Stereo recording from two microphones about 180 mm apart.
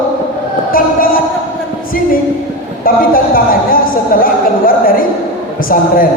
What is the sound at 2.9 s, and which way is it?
A woman's voice, 50° left (ahead or behind).